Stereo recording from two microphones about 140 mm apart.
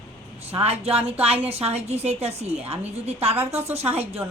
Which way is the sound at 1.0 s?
10° right (ahead or behind).